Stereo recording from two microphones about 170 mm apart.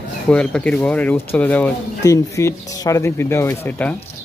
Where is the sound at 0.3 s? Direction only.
5° left (ahead or behind).